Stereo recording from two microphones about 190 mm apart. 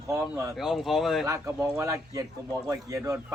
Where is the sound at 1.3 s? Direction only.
10° right (ahead or behind).